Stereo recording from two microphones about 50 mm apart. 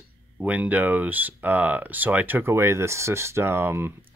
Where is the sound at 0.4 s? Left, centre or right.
Right.